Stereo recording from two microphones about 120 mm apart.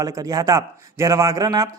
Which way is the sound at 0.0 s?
30° right (ahead or behind).